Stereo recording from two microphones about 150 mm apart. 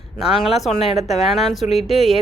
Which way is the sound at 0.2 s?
Centre (ahead or behind).